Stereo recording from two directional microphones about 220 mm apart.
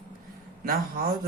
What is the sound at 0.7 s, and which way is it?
Speech, 40° right (ahead or behind).